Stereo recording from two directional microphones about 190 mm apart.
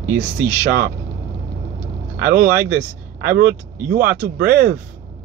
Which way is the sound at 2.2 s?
50° right (ahead or behind).